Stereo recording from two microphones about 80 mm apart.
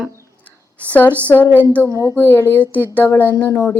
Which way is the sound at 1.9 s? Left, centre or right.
Left.